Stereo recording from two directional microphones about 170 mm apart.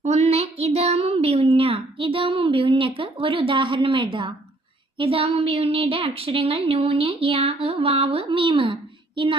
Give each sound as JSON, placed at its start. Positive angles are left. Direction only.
{"t": 0.0, "sound": "a woman's voice", "side_deg": -40}